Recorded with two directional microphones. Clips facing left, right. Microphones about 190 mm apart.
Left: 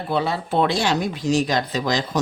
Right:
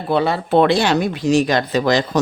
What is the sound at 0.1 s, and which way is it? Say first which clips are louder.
Speech: right 6 dB; 65° right (ahead or behind).